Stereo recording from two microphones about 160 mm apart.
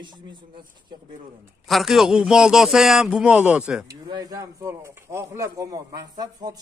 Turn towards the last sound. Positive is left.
turn(degrees=-25)  # may be behind; listen again after turning